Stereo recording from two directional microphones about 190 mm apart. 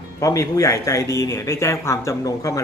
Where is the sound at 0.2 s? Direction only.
15° left (ahead or behind).